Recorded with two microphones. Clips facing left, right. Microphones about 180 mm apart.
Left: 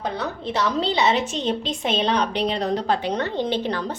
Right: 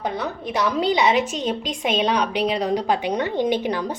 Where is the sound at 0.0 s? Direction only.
15° right (ahead or behind).